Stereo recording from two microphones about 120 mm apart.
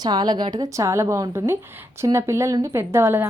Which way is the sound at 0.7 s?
25° right (ahead or behind).